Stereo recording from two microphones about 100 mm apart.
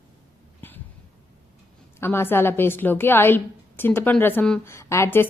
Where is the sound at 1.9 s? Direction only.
25° left (ahead or behind).